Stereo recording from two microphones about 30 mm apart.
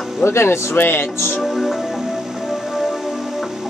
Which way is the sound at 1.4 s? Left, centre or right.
Centre.